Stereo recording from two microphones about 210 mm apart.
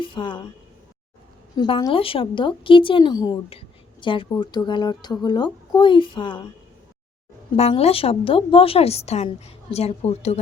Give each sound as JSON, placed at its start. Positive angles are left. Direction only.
{"t": 0.0, "sound": "speech", "side_deg": 25}
{"t": 1.5, "sound": "a woman's voice", "side_deg": 20}
{"t": 7.5, "sound": "a woman's voice", "side_deg": 30}